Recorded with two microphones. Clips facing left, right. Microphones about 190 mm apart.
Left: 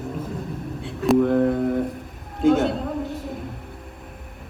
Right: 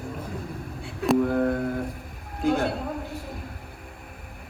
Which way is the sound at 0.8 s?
Centre (ahead or behind).